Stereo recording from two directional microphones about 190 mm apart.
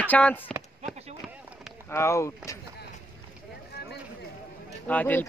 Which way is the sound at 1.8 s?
15° left (ahead or behind).